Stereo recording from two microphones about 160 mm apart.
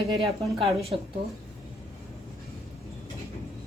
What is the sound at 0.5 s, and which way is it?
Speech, 40° right (ahead or behind).